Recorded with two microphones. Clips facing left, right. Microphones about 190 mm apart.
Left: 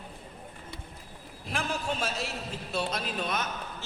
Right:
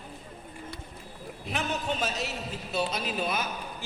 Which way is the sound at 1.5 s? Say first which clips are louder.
Right 1 dB; centre (ahead or behind).